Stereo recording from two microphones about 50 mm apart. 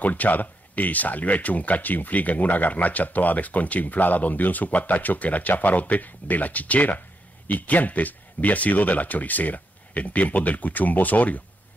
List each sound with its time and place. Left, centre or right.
0.0 s speech: left